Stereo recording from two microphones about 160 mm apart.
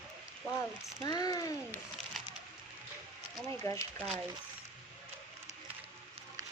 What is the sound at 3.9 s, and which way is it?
Speech, centre (ahead or behind).